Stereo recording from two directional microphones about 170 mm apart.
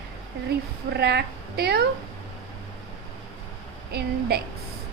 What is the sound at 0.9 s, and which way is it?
Speech, 75° right (ahead or behind).